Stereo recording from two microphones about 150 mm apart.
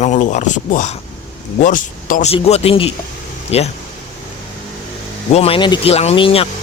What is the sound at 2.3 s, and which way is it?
Speech, 45° left (ahead or behind).